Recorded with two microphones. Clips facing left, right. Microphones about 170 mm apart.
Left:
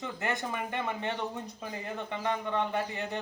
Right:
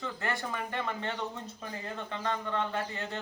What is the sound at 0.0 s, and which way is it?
A man's voice, 20° left (ahead or behind).